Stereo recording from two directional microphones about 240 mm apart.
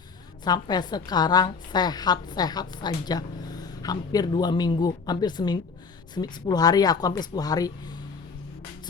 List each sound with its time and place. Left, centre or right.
0.4 s a woman's voice: centre